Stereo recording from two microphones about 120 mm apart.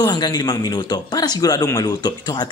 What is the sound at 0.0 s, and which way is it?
Speech, 35° left (ahead or behind).